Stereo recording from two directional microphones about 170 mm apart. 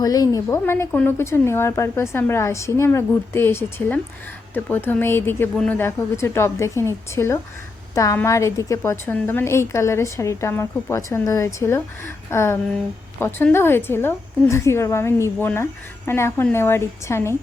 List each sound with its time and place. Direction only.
0.0 s a woman's voice: 20° left (ahead or behind)